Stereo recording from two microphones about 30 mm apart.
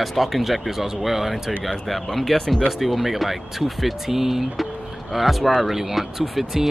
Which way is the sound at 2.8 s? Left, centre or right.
Centre.